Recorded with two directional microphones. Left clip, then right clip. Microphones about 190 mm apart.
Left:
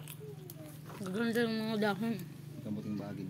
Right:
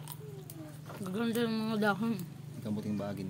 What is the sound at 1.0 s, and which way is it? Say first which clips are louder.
Speech: even; 5° right (ahead or behind).